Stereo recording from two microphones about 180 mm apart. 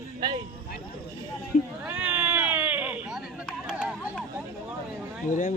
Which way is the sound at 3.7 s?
5° right (ahead or behind).